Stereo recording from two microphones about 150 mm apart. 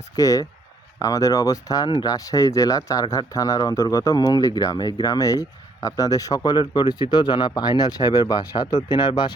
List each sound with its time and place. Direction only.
0.2 s speech: 25° left (ahead or behind)